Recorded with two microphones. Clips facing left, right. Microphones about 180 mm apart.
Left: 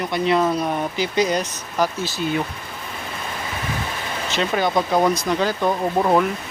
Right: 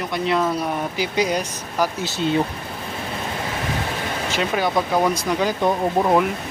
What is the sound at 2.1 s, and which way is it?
Speech, 25° right (ahead or behind).